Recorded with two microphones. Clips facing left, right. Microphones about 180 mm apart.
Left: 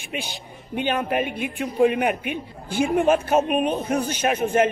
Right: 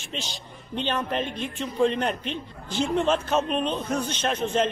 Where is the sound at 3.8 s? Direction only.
60° left (ahead or behind).